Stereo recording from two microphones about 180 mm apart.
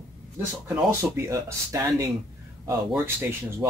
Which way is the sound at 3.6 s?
10° right (ahead or behind).